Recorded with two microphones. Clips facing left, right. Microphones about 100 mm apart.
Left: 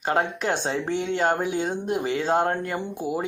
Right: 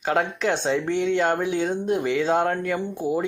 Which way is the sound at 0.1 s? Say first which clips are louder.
Right 1 dB; 40° left (ahead or behind).